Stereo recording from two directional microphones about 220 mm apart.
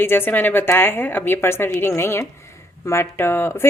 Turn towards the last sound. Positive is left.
turn(degrees=10)  # may be behind; listen again after turning